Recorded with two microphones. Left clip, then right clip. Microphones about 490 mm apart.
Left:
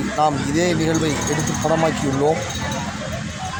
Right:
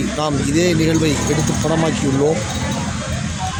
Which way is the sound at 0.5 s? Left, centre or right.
Right.